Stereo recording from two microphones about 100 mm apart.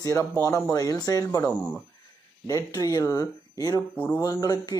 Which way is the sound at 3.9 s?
15° left (ahead or behind).